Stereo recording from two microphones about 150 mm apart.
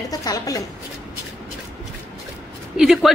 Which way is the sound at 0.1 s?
25° left (ahead or behind).